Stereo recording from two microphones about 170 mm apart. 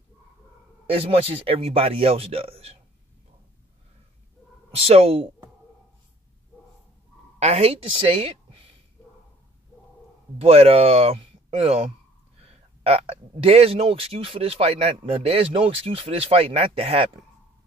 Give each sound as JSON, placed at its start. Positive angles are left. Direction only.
{"t": 0.8, "sound": "speech", "side_deg": -35}
{"t": 4.6, "sound": "speech", "side_deg": -35}
{"t": 7.3, "sound": "a woman's voice", "side_deg": -40}
{"t": 10.4, "sound": "speech", "side_deg": -35}